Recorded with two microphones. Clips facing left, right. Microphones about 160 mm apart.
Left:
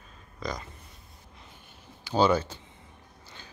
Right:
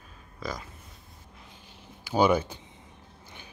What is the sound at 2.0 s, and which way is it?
Speech, 10° right (ahead or behind).